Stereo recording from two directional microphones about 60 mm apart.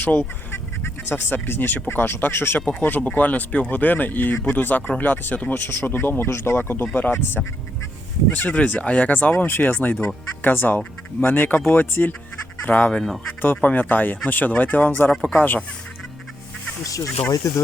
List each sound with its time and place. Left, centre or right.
0.0 s goose: left
0.5 s speech: left
8.3 s speech: left
16.8 s speech: left